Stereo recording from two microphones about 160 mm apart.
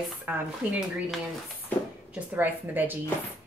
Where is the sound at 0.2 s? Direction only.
10° right (ahead or behind).